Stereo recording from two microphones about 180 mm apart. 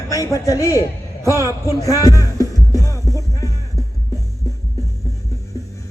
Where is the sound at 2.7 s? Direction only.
15° left (ahead or behind).